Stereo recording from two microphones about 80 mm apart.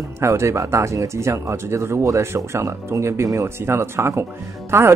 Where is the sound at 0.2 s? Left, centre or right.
Right.